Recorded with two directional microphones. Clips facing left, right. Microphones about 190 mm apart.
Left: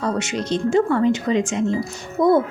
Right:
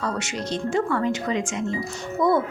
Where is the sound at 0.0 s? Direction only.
20° left (ahead or behind).